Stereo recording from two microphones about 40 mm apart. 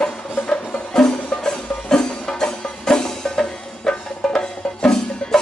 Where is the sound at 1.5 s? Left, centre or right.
Centre.